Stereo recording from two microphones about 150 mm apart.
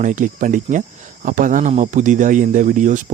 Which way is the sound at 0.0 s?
60° right (ahead or behind).